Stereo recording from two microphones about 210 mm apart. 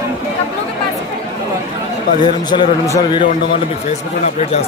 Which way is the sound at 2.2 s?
20° left (ahead or behind).